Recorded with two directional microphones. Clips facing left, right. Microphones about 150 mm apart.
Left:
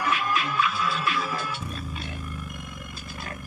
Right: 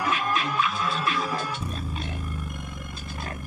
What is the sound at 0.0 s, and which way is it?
Music, 35° right (ahead or behind).